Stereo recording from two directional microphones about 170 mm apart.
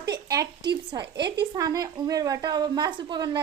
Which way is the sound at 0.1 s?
25° right (ahead or behind).